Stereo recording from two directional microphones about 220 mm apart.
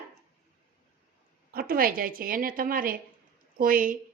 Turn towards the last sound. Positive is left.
turn(degrees=-40)  # may be behind; listen again after turning